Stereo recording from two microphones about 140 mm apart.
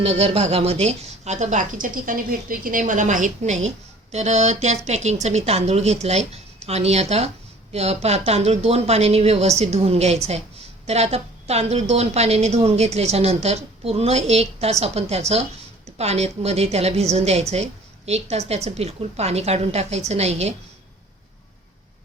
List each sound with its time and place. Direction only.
0.0 s a woman's voice: 45° right (ahead or behind)